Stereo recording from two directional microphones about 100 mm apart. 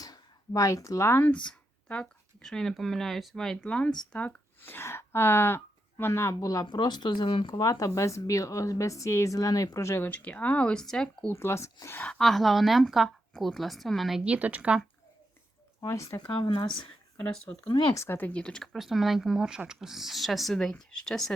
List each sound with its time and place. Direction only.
0.0 s speech: 35° left (ahead or behind)
1.5 s speech: 10° left (ahead or behind); by 6.7 s 35° left (ahead or behind)
6.7 s speech: 50° left (ahead or behind); by 10.1 s 30° left (ahead or behind)
10.1 s speech: 15° left (ahead or behind)
11.3 s speech: 25° left (ahead or behind)
11.9 s speech: 10° left (ahead or behind)
14.3 s speech: 15° right (ahead or behind)
15.9 s speech: 30° left (ahead or behind)
16.2 s speech: 50° left (ahead or behind)
17.3 s speech: 5° left (ahead or behind)
17.7 s speech: 50° left (ahead or behind)
17.9 s speech: 25° left (ahead or behind); by 21.3 s 5° left (ahead or behind)